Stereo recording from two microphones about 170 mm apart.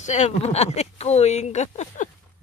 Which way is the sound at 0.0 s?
45° left (ahead or behind).